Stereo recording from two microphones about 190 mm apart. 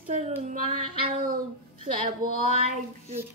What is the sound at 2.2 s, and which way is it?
Speech, 50° right (ahead or behind).